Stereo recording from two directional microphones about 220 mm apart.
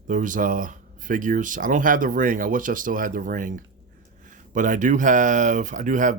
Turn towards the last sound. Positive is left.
turn(degrees=-35)  # may be behind; listen again after turning